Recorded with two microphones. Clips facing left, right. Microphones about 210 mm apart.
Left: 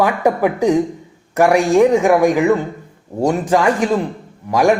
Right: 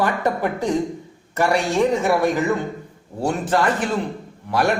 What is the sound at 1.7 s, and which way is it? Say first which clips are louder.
Speech: left 7 dB; 75° left (ahead or behind).